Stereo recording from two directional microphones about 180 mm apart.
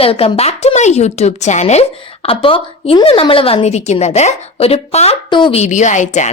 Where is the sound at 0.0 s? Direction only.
30° left (ahead or behind).